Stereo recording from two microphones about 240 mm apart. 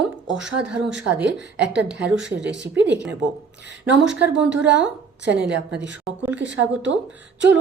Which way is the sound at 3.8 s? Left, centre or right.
Centre.